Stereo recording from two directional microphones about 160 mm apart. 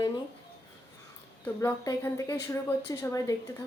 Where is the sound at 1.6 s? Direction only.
20° left (ahead or behind).